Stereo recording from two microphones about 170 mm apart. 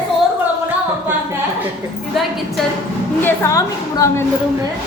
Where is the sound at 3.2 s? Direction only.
20° left (ahead or behind).